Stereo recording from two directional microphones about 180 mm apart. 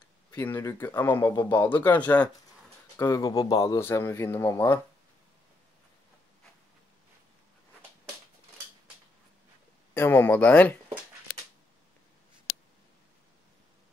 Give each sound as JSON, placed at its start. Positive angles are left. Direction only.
{"t": 0.3, "sound": "speech", "side_deg": 15}
{"t": 9.9, "sound": "speech", "side_deg": 10}